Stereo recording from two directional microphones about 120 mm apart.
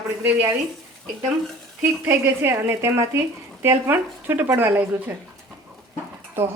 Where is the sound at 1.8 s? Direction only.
20° right (ahead or behind).